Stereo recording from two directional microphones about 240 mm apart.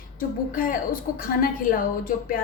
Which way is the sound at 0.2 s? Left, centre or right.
Left.